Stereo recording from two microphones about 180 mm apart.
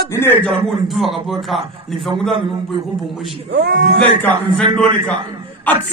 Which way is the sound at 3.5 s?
65° right (ahead or behind).